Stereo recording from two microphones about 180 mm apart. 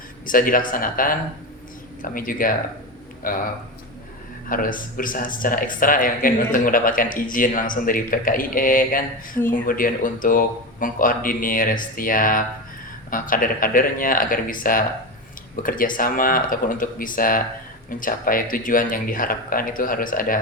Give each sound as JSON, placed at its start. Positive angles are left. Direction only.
{"t": 0.3, "sound": "speech", "side_deg": 50}
{"t": 4.4, "sound": "speech", "side_deg": 50}